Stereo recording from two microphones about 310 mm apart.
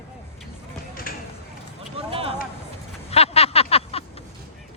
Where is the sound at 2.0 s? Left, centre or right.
Centre.